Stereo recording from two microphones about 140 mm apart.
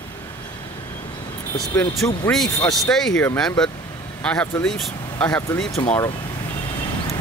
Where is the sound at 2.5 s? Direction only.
20° left (ahead or behind).